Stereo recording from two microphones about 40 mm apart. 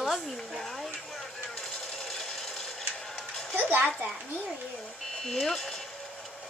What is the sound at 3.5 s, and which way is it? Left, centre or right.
Speech, right.